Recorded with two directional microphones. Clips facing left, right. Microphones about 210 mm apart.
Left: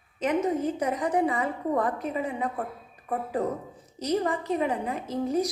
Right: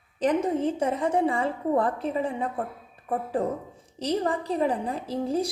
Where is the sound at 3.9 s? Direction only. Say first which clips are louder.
Even; 30° right (ahead or behind).